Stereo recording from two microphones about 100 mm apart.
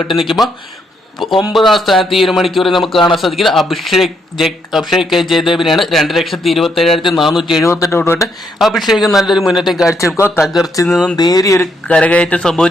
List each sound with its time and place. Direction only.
0.1 s speech: centre (ahead or behind)
7.6 s speech: 30° left (ahead or behind)
8.5 s speech: centre (ahead or behind)
11.2 s speech: 40° left (ahead or behind)
11.9 s speech: 10° left (ahead or behind)